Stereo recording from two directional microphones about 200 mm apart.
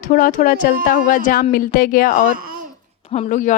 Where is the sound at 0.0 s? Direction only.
40° left (ahead or behind).